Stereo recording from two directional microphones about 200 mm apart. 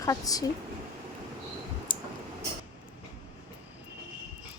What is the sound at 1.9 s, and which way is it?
Tick, 25° left (ahead or behind).